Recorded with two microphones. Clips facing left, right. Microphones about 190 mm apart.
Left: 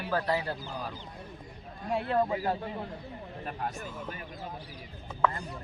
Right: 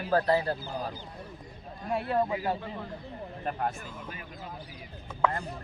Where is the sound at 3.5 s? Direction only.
50° right (ahead or behind).